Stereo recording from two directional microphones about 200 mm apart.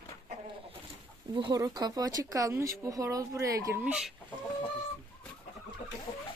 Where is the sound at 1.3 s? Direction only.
20° right (ahead or behind); by 4.1 s 5° right (ahead or behind).